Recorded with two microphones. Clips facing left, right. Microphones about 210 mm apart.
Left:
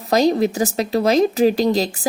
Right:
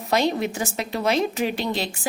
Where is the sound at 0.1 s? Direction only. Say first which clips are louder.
Left 6 dB; 40° left (ahead or behind).